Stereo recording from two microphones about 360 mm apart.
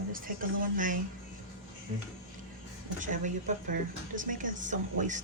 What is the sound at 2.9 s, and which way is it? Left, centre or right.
Speech, right.